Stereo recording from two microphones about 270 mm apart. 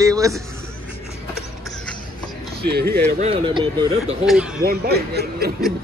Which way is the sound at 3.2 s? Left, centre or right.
Centre.